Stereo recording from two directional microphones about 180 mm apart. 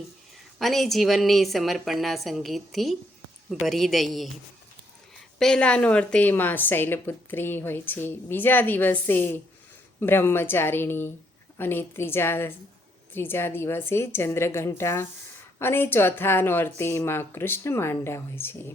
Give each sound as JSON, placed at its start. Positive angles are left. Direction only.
{"t": 0.6, "sound": "a woman's voice", "side_deg": 0}
{"t": 5.4, "sound": "a woman's voice", "side_deg": 5}